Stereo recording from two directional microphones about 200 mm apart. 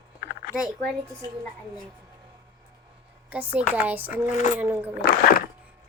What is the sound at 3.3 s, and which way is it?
Speech, 10° right (ahead or behind).